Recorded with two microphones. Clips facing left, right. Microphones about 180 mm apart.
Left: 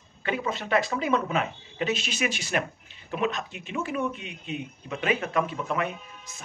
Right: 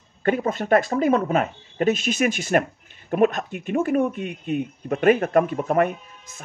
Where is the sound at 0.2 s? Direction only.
50° right (ahead or behind).